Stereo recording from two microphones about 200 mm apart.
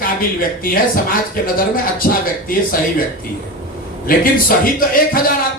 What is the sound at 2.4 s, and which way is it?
Speech, 45° left (ahead or behind).